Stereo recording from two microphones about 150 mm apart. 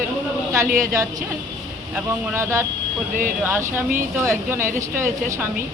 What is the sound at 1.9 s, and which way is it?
Speech, 15° right (ahead or behind).